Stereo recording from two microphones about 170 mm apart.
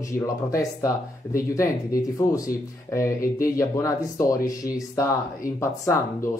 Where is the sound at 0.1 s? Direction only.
20° left (ahead or behind).